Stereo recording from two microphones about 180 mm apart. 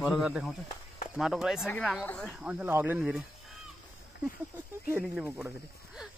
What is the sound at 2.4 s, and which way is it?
Speech, 10° right (ahead or behind).